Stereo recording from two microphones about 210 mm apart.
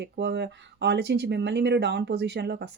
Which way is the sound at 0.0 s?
55° right (ahead or behind).